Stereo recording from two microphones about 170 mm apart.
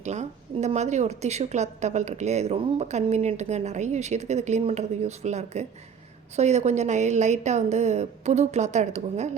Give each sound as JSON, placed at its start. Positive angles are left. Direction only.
{"t": 0.0, "sound": "a woman's voice", "side_deg": -40}